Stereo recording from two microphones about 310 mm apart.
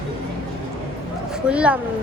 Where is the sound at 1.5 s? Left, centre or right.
Centre.